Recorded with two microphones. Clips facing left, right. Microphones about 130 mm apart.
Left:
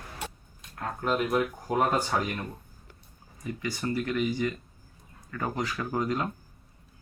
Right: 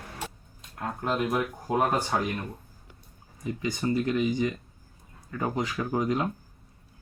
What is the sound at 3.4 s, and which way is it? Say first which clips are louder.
Speech: right 3 dB; 20° right (ahead or behind).